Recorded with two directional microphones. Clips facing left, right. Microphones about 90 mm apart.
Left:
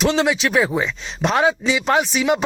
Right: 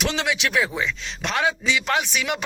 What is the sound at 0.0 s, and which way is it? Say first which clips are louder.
Speech: left 6 dB; 30° left (ahead or behind).